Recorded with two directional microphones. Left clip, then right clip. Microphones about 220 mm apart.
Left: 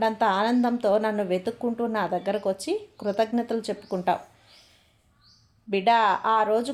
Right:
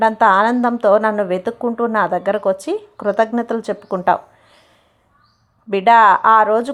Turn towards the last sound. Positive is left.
turn(degrees=-20)  # may be behind; listen again after turning